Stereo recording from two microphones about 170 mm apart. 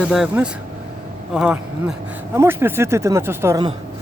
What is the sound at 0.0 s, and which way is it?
Speech, 5° right (ahead or behind).